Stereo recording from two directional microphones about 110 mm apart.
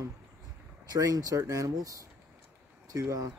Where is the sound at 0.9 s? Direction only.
35° right (ahead or behind).